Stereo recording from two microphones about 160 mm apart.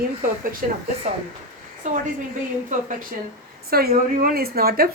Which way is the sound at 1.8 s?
50° right (ahead or behind).